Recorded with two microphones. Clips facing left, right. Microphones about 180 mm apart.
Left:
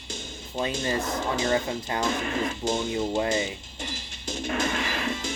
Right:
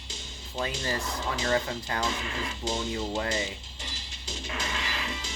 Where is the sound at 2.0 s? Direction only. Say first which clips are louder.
Left 6 dB; 50° left (ahead or behind).